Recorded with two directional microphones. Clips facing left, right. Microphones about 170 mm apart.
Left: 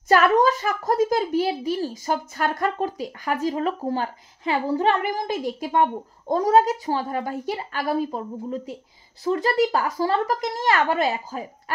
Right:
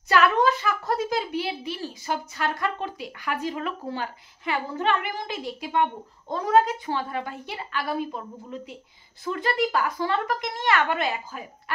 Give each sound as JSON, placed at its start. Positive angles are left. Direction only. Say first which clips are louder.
{"t": 0.1, "sound": "a child's voice", "louder": "left 3 dB", "side_deg": 40}